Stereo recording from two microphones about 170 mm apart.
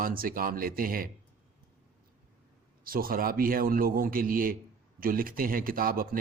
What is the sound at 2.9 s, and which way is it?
Speech, 60° right (ahead or behind).